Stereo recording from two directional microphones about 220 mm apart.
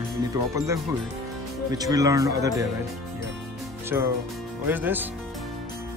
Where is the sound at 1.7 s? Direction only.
15° right (ahead or behind).